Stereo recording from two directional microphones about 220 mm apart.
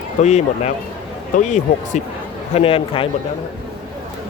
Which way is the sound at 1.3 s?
35° left (ahead or behind).